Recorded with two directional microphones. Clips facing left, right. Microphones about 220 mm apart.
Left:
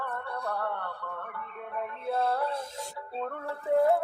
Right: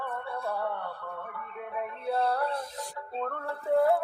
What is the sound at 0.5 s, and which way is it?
Music, 10° right (ahead or behind).